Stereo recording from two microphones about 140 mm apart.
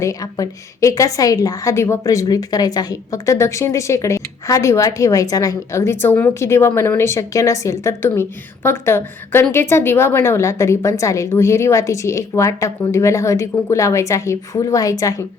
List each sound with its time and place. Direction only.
0.0 s a woman's voice: 25° left (ahead or behind)